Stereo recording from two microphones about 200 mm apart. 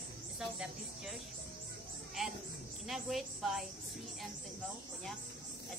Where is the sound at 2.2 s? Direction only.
Centre (ahead or behind).